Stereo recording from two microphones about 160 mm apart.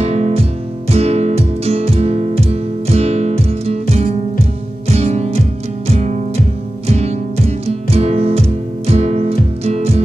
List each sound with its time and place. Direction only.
0.0 s music: 45° right (ahead or behind)
4.8 s music: 40° right (ahead or behind)
6.9 s music: 40° right (ahead or behind)